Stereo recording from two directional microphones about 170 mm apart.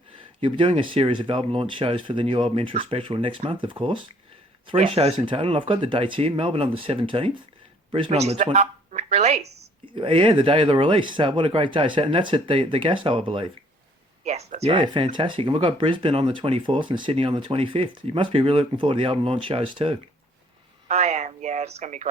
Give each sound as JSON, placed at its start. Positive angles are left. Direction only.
{"t": 0.4, "sound": "speech", "side_deg": -30}
{"t": 9.8, "sound": "speech", "side_deg": -30}
{"t": 14.3, "sound": "speech", "side_deg": -40}